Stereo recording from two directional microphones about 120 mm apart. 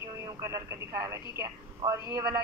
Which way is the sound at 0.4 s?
25° right (ahead or behind).